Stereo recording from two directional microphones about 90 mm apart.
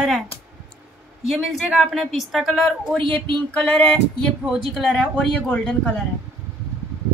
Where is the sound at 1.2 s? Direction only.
Centre (ahead or behind).